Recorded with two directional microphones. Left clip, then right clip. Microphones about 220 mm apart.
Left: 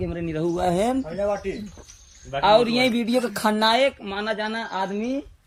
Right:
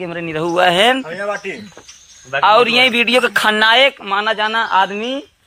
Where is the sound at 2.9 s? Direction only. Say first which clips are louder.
Right 11 dB; 55° right (ahead or behind).